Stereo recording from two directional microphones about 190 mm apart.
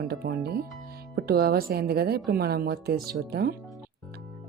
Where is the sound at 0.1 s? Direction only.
55° right (ahead or behind).